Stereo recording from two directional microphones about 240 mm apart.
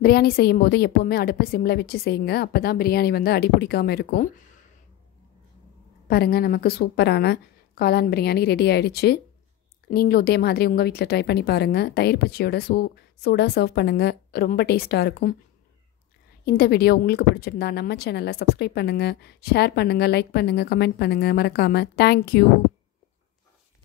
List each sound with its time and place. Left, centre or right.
0.0 s a woman's voice: left
6.0 s a woman's voice: left
16.4 s a woman's voice: left